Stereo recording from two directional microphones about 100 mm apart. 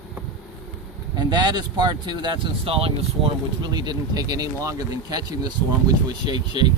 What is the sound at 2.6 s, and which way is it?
Speech, 75° right (ahead or behind).